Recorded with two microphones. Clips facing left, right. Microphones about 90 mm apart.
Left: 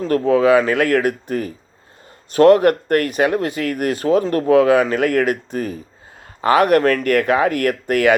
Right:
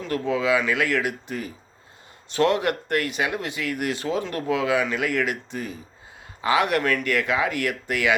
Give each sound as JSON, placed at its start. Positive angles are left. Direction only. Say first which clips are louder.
{"t": 0.0, "sound": "speech", "louder": "left 9 dB", "side_deg": 45}